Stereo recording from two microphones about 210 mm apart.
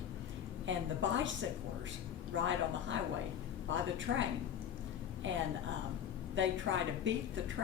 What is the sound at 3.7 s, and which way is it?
Speech, 60° right (ahead or behind).